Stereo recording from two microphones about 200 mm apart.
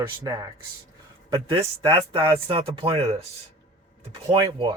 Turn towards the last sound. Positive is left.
turn(degrees=-20)  # may be behind; listen again after turning